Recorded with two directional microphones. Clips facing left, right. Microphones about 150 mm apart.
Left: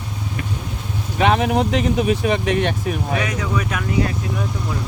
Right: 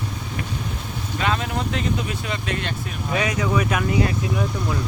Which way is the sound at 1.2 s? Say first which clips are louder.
Left 8 dB; 80° left.